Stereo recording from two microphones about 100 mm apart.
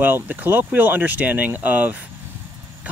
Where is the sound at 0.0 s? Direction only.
15° right (ahead or behind).